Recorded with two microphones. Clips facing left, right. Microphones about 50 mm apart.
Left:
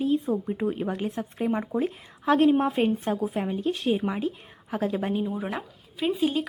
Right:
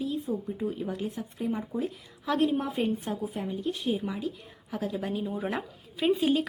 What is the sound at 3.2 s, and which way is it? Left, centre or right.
Speech, left.